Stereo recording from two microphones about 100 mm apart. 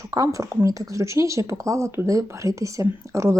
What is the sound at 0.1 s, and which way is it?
Speech, 35° right (ahead or behind).